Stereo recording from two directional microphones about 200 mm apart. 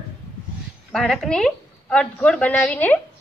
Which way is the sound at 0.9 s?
Centre (ahead or behind).